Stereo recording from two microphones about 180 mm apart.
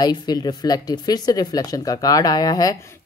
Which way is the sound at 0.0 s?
20° left (ahead or behind).